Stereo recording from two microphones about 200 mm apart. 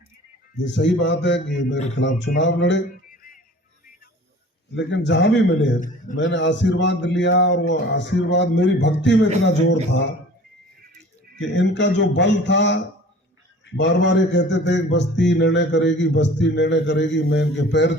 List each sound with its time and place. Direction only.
0.6 s a man's voice: 65° left (ahead or behind)
4.7 s a man's voice: 60° left (ahead or behind)
11.3 s a man's voice: 65° left (ahead or behind)